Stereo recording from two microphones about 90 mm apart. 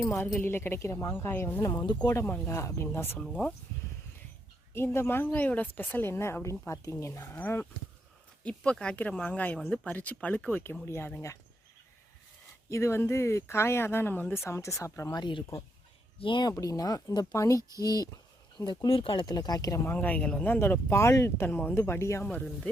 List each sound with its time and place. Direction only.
0.3 s speech: 25° left (ahead or behind)
2.5 s speech: 35° left (ahead or behind)
3.2 s speech: 15° left (ahead or behind)
4.7 s speech: 30° left (ahead or behind)
7.3 s speech: 20° left (ahead or behind)
12.7 s speech: 30° left (ahead or behind)
14.4 s speech: 35° left (ahead or behind)
15.1 s speech: 60° left (ahead or behind)
16.5 s speech: 40° left (ahead or behind)
18.9 s speech: 70° left (ahead or behind)
19.2 s speech: 50° left (ahead or behind)
19.8 s speech: 20° left (ahead or behind)
22.2 s speech: 15° left (ahead or behind)